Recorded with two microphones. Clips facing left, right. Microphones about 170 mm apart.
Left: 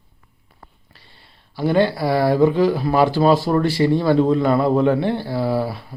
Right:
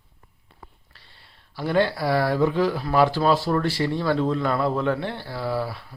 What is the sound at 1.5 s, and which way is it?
Speech, centre (ahead or behind).